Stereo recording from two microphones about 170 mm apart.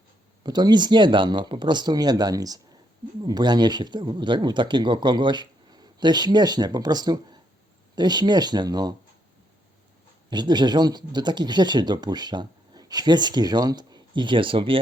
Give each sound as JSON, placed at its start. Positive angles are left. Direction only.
{"t": 0.4, "sound": "speech", "side_deg": -25}
{"t": 10.2, "sound": "speech", "side_deg": -25}